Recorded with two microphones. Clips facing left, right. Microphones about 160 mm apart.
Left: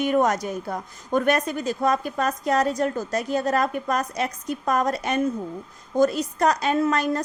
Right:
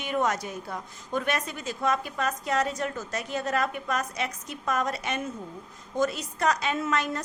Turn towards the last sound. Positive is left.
turn(degrees=35)  # may be behind; listen again after turning